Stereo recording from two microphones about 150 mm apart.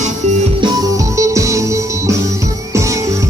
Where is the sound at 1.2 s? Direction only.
20° right (ahead or behind).